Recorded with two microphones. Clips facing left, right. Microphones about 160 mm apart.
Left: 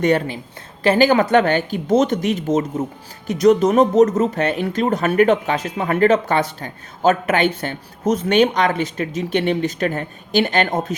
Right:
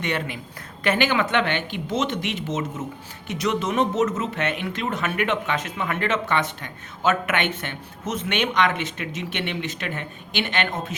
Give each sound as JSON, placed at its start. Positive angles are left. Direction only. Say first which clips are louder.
{"t": 0.0, "sound": "speech", "louder": "left 10 dB", "side_deg": 40}